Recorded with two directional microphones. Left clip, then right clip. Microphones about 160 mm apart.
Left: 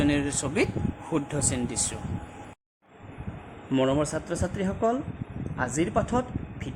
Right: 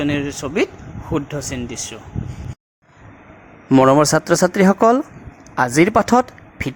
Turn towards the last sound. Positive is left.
turn(degrees=-50)  # may be behind; listen again after turning